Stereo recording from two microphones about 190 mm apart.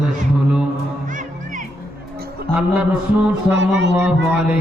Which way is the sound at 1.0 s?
45° right (ahead or behind).